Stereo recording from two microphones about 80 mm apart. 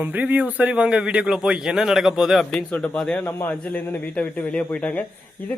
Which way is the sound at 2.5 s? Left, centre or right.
Centre.